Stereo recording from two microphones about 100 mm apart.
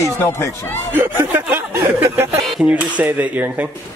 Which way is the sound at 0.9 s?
20° right (ahead or behind).